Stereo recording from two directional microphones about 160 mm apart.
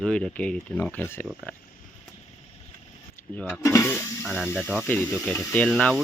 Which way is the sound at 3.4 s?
5° left (ahead or behind).